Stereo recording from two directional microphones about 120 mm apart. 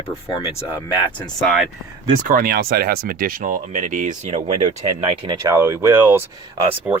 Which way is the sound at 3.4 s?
90° right.